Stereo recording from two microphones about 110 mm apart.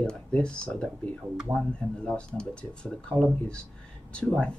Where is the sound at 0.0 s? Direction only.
10° left (ahead or behind).